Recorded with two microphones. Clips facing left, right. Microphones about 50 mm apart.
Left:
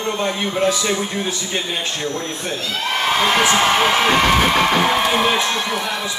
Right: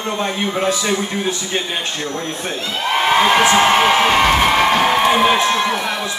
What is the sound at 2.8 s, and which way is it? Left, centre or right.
Speech, right.